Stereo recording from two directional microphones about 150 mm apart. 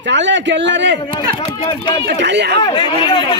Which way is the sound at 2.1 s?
90° right.